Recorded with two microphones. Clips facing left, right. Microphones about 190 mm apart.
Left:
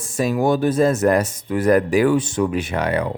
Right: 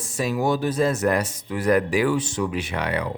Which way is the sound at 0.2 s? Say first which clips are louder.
Left 5 dB; 50° left (ahead or behind).